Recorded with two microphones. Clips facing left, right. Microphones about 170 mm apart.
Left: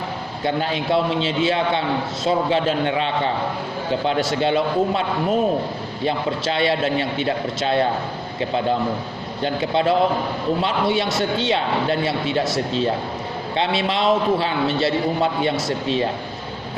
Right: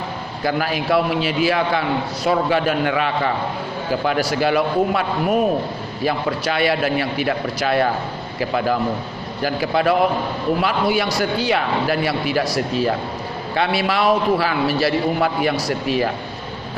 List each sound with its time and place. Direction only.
0.4 s a man's voice: 25° left (ahead or behind)